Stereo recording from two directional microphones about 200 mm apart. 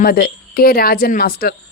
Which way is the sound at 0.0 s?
45° left (ahead or behind).